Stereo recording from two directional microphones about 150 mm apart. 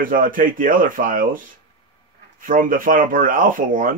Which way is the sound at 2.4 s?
65° right (ahead or behind).